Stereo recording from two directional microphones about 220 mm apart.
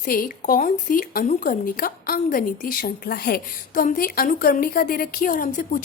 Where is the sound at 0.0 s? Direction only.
40° left (ahead or behind).